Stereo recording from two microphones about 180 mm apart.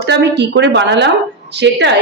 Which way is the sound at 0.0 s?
70° right (ahead or behind).